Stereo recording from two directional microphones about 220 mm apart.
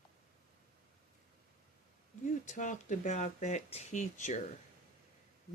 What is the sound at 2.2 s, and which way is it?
Speech, 35° left (ahead or behind).